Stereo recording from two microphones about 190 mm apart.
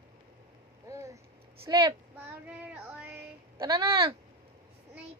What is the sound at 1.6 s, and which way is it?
Speech, 20° right (ahead or behind).